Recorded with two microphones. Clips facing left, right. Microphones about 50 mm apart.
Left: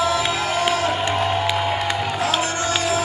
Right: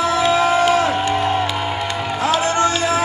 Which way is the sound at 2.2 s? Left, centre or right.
Right.